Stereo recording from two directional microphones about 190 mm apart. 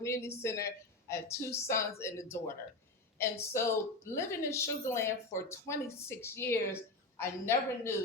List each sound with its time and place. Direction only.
0.0 s a woman's voice: 15° left (ahead or behind)